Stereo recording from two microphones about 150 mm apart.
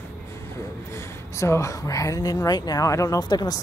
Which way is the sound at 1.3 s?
20° left (ahead or behind).